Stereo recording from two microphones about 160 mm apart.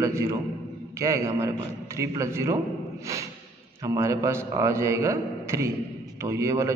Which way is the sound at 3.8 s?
20° right (ahead or behind).